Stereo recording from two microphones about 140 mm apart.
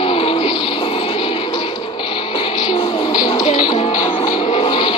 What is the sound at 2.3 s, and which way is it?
Music, 40° left (ahead or behind).